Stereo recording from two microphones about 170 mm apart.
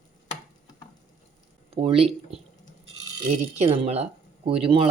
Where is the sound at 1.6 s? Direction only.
35° right (ahead or behind).